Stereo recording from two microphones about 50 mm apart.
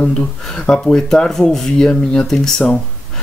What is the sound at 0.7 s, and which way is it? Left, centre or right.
Speech, centre.